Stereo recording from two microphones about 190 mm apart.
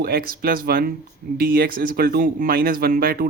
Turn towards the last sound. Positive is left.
turn(degrees=-50)  # may be behind; listen again after turning